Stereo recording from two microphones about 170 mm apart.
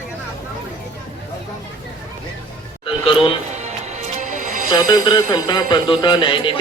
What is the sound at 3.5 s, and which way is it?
Music, 45° right (ahead or behind).